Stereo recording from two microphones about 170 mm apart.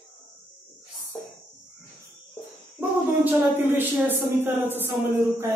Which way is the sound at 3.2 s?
10° right (ahead or behind).